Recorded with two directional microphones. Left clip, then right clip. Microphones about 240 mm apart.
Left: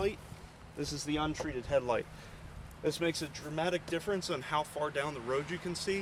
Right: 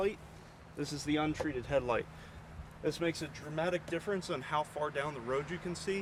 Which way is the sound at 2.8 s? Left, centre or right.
Left.